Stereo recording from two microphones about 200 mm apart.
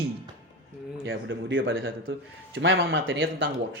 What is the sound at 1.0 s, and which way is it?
Speech, 70° right (ahead or behind).